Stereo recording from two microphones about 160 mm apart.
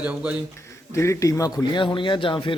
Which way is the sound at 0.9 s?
20° left (ahead or behind).